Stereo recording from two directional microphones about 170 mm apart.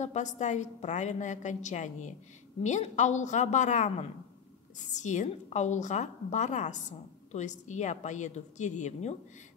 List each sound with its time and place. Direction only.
0.0 s a woman's voice: 45° left (ahead or behind)